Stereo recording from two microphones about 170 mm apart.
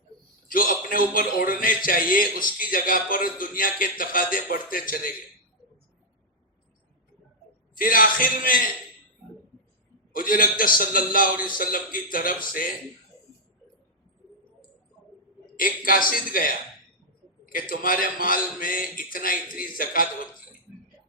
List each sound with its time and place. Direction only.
0.4 s a man's voice: 55° left (ahead or behind)
7.8 s a man's voice: 55° left (ahead or behind)
10.1 s a man's voice: 55° left (ahead or behind)
15.5 s a man's voice: 55° left (ahead or behind)